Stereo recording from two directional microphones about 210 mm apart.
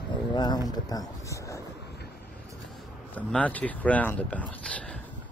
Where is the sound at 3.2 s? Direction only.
5° left (ahead or behind).